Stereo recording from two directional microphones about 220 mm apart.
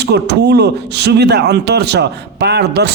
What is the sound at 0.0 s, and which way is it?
A man's voice, 50° right (ahead or behind).